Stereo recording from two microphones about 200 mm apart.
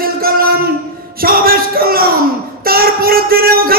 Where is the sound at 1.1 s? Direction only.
45° right (ahead or behind).